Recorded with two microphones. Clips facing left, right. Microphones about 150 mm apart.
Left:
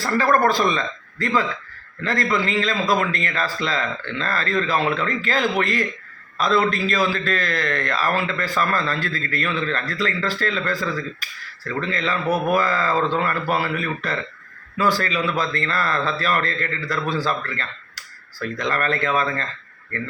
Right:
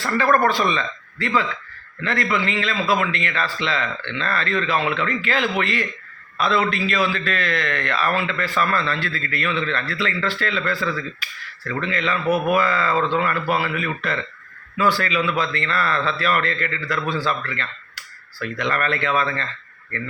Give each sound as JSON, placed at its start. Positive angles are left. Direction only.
{"t": 0.0, "sound": "a man's voice", "side_deg": 35}